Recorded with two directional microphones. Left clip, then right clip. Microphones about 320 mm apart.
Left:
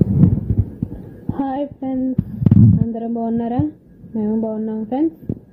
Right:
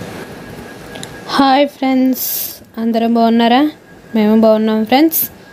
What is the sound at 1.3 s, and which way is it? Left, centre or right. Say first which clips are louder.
Speech: right 13 dB; centre.